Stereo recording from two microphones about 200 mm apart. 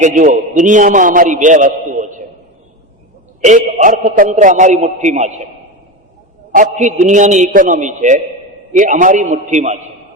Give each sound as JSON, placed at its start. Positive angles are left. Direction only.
{"t": 0.0, "sound": "a man's voice", "side_deg": -40}
{"t": 3.8, "sound": "a man's voice", "side_deg": -40}
{"t": 6.5, "sound": "a man's voice", "side_deg": -40}